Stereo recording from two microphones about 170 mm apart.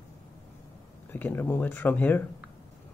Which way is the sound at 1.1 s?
10° left (ahead or behind).